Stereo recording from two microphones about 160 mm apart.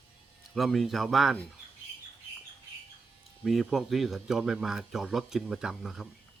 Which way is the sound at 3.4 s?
Centre (ahead or behind).